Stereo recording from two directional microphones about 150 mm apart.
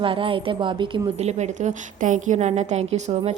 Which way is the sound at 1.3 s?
50° right (ahead or behind).